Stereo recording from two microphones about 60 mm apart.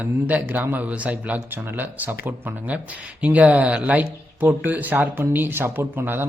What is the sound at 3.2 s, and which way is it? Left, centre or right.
Speech, right.